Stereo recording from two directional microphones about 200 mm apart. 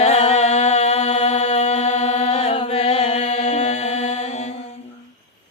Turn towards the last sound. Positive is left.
turn(degrees=35)  # may be behind; listen again after turning